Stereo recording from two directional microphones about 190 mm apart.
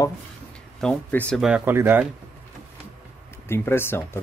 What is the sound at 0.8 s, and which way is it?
Speech, 5° left (ahead or behind).